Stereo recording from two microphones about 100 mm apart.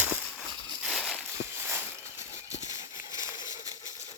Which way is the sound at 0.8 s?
Centre (ahead or behind).